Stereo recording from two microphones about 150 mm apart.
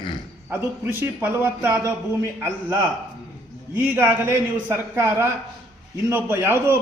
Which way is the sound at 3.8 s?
15° right (ahead or behind).